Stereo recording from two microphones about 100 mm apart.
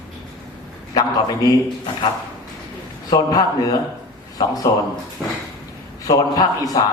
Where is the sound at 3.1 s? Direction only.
40° left (ahead or behind).